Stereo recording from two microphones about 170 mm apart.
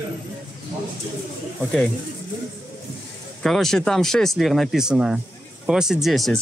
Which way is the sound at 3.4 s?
Centre (ahead or behind).